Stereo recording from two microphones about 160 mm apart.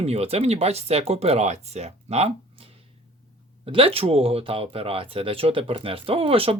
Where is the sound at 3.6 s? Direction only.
35° right (ahead or behind).